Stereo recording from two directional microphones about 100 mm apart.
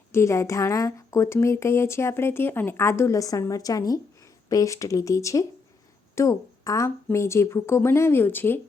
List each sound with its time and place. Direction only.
0.1 s speech: 30° left (ahead or behind)